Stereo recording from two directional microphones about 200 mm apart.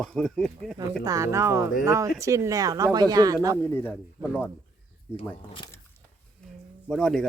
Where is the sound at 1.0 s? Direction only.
15° right (ahead or behind).